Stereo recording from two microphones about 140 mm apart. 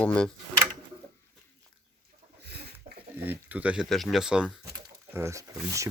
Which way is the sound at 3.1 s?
15° right (ahead or behind).